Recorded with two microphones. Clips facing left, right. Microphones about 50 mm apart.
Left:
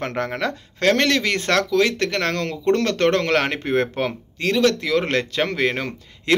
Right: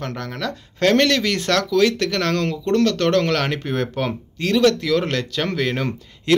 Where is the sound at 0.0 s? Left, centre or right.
Left.